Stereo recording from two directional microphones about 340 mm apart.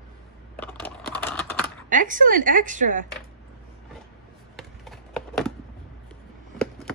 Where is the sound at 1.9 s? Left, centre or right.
Right.